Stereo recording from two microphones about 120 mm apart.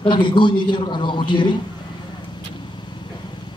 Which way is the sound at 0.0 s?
40° left (ahead or behind).